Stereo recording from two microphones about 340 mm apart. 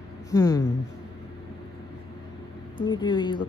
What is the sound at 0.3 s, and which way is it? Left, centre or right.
Speech, centre.